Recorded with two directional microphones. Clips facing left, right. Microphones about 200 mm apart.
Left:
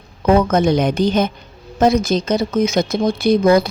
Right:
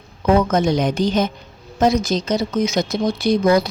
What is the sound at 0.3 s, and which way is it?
A woman's voice, 55° left (ahead or behind).